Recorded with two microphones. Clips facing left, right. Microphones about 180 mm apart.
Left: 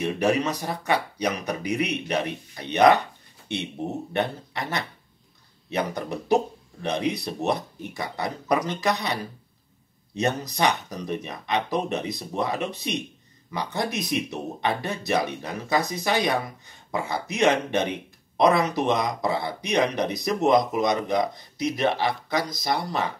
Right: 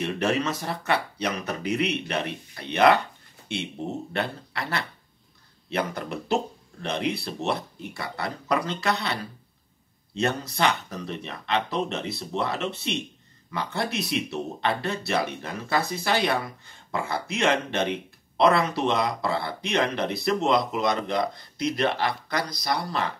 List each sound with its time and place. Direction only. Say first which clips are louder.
0.0 s speech: left 2 dB; 15° left (ahead or behind)